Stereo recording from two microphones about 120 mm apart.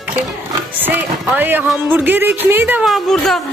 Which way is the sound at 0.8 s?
15° right (ahead or behind).